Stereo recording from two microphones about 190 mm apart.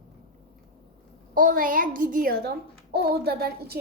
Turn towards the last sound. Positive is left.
turn(degrees=-55)  # may be behind; listen again after turning